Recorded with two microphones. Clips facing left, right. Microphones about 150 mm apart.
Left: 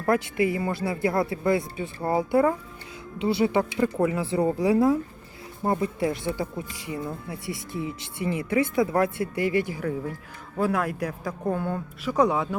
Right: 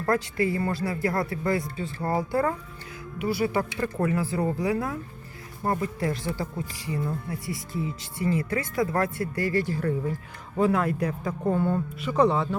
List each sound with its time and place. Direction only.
0.0 s speech: 15° left (ahead or behind)
3.2 s speech: 25° left (ahead or behind)
8.8 s speech: 10° left (ahead or behind)
9.0 s speech: 25° left (ahead or behind)
9.8 s speech: centre (ahead or behind)
11.3 s speech: 5° right (ahead or behind)